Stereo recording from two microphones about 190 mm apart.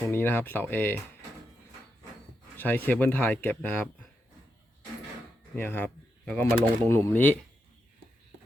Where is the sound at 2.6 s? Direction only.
10° left (ahead or behind).